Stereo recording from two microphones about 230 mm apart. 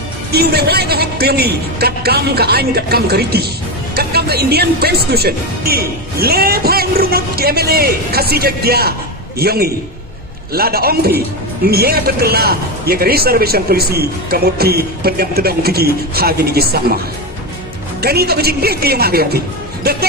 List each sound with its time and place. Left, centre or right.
0.3 s a man's voice: right
18.0 s a man's voice: right
19.8 s music: right